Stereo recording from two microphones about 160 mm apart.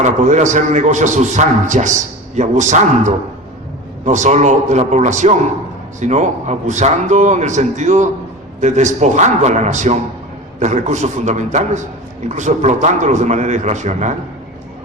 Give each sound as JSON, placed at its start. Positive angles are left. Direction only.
{"t": 0.0, "sound": "a man's voice", "side_deg": -50}